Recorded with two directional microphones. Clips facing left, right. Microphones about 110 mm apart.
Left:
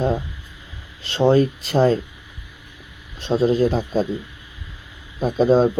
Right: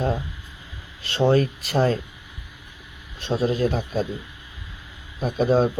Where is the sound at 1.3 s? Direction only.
25° left (ahead or behind).